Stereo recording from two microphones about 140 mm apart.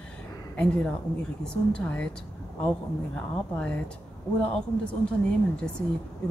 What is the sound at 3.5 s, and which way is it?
Speech, 10° left (ahead or behind).